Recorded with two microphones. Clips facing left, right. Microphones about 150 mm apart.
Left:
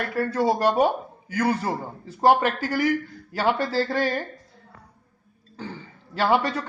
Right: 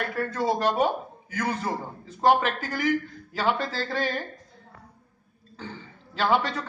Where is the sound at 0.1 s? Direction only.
5° left (ahead or behind).